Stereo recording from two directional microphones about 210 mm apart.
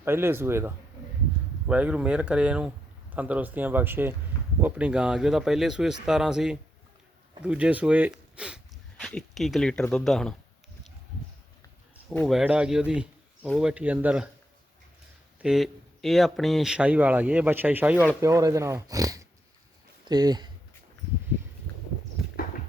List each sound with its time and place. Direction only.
0.0 s speech: 10° right (ahead or behind)
12.1 s speech: centre (ahead or behind)
15.4 s speech: centre (ahead or behind); by 20.5 s 20° right (ahead or behind)